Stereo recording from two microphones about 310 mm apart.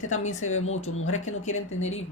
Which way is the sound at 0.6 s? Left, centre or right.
Left.